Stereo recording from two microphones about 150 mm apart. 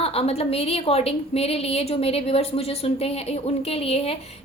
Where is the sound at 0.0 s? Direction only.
40° left (ahead or behind).